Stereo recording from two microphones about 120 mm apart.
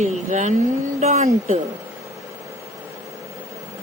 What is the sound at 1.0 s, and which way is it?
Speech, 75° right (ahead or behind).